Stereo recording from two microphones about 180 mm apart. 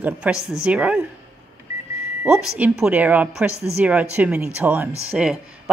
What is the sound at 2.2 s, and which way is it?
A woman's voice, 5° right (ahead or behind).